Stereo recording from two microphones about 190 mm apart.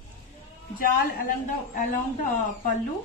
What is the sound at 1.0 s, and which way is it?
Speech, 45° left (ahead or behind).